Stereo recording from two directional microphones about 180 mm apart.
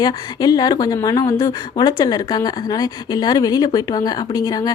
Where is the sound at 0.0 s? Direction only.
25° left (ahead or behind).